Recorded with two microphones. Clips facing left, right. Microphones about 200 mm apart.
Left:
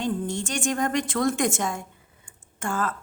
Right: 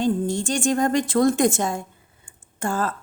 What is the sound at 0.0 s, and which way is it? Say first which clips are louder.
A woman's voice: right 5 dB; 30° right (ahead or behind).